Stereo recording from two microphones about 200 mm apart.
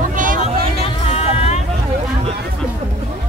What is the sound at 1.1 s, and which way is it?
Vehicle, 30° left (ahead or behind).